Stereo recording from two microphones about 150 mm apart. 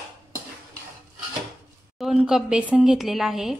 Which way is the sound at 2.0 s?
Centre (ahead or behind).